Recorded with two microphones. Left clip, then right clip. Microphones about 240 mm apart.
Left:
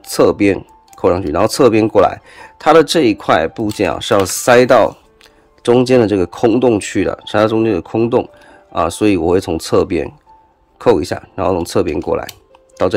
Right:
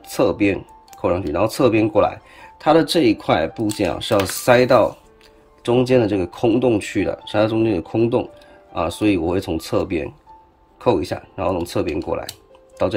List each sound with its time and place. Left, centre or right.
0.0 s speech: left
5.8 s speech: left